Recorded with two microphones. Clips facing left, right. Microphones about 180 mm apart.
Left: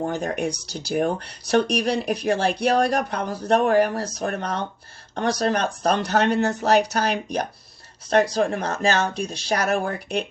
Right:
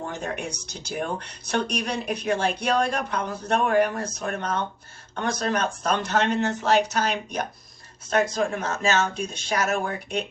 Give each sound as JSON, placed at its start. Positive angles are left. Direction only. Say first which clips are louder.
{"t": 0.0, "sound": "speech", "louder": "left 6 dB", "side_deg": 40}